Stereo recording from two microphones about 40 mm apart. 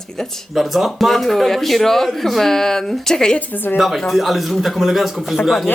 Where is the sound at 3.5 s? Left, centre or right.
Left.